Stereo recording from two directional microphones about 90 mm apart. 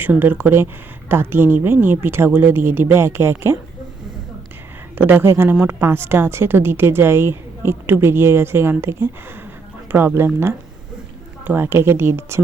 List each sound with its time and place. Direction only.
0.0 s speech: 20° right (ahead or behind)
4.9 s speech: 25° right (ahead or behind)